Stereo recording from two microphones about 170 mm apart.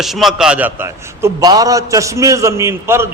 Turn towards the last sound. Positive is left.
turn(degrees=-15)  # may be behind; listen again after turning